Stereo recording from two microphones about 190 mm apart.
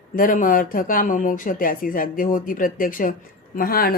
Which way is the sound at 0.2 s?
45° left (ahead or behind).